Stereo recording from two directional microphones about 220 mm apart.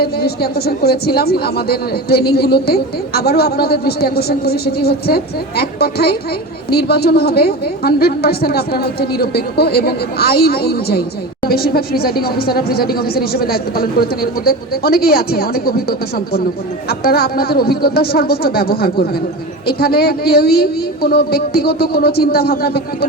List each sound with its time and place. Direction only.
0.0 s a woman's voice: 45° left (ahead or behind)